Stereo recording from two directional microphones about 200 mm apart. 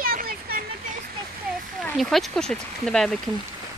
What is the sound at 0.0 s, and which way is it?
Vehicle, 45° right (ahead or behind).